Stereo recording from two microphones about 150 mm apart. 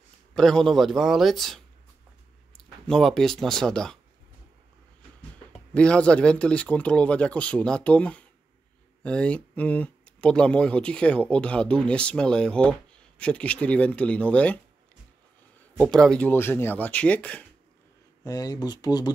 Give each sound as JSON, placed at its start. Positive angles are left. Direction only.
{"t": 0.4, "sound": "a man's voice", "side_deg": 5}
{"t": 5.8, "sound": "speech", "side_deg": 5}
{"t": 15.8, "sound": "speech", "side_deg": 5}
{"t": 18.2, "sound": "speech", "side_deg": 25}